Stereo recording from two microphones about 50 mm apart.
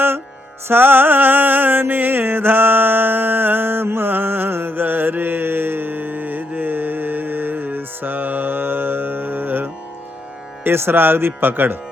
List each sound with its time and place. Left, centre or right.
0.7 s music: right
10.6 s speech: right